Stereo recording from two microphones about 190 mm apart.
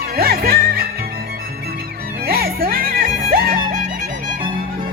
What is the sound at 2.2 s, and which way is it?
Music, 55° right (ahead or behind).